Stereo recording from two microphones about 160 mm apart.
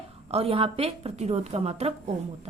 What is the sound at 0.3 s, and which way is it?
A woman's voice, 40° right (ahead or behind).